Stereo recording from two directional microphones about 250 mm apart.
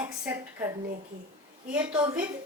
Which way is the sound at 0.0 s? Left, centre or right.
Centre.